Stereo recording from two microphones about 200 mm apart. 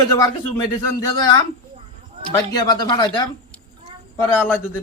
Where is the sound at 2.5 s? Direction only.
20° left (ahead or behind).